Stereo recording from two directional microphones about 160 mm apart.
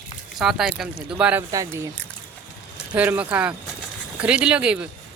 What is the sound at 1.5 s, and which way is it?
Speech, 20° right (ahead or behind).